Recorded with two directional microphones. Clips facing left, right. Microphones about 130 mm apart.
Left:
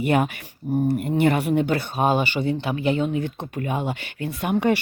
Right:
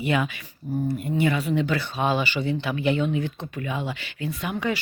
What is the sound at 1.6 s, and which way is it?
Speech, 45° left (ahead or behind).